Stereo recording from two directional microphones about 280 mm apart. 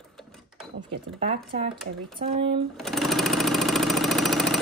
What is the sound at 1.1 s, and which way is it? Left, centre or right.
Speech, right.